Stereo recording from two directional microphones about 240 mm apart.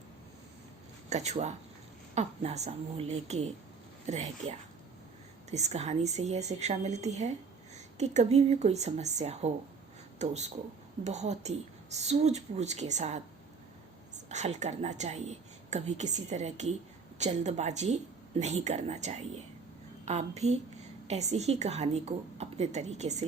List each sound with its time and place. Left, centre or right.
1.1 s a woman's voice: right
14.3 s a woman's voice: right